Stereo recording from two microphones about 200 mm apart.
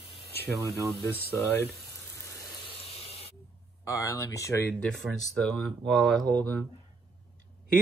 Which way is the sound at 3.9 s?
15° left (ahead or behind).